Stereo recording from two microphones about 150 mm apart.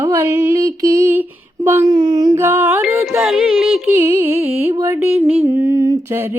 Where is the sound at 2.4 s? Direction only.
15° right (ahead or behind).